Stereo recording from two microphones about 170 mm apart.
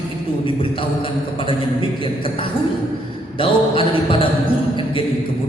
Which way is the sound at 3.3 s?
30° left (ahead or behind).